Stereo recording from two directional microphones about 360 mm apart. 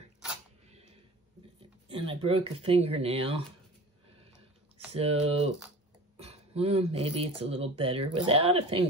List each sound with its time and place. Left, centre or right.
1.9 s speech: centre
4.9 s speech: centre